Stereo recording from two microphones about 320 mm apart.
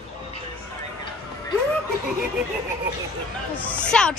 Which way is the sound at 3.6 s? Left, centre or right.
Centre.